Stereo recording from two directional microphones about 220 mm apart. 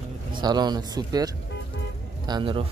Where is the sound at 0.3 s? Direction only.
20° right (ahead or behind).